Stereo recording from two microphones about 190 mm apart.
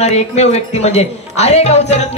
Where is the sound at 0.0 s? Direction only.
35° left (ahead or behind).